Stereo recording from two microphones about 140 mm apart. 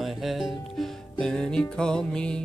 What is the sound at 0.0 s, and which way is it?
Speech, centre (ahead or behind).